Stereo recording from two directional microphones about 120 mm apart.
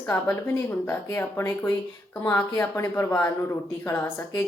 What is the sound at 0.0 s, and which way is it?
A woman's voice, 20° left (ahead or behind).